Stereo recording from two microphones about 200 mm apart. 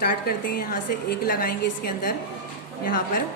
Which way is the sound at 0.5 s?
50° left (ahead or behind).